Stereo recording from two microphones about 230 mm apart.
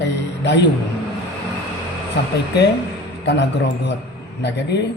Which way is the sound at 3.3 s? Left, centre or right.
Left.